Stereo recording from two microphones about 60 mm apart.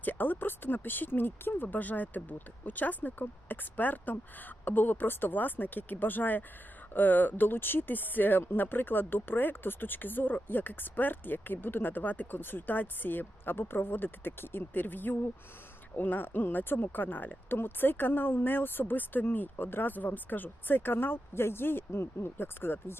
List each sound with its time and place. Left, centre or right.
0.0 s speech: left